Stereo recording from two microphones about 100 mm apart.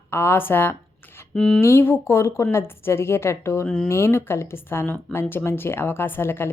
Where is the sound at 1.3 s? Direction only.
5° left (ahead or behind).